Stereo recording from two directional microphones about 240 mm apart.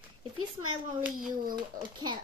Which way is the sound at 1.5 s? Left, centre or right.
Centre.